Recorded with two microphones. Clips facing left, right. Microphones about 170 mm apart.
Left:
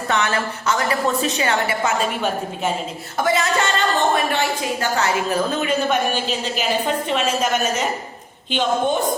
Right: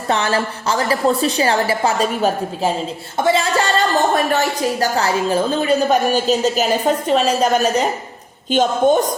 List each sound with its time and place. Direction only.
0.1 s a woman's voice: 30° right (ahead or behind)